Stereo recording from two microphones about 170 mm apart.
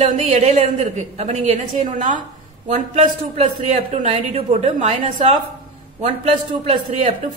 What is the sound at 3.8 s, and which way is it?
A woman's voice, 40° right (ahead or behind).